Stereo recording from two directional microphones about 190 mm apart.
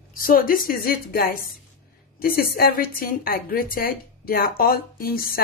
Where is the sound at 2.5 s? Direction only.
50° left (ahead or behind).